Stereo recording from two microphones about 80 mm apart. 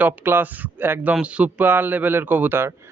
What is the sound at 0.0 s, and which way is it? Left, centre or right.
A man's voice, right.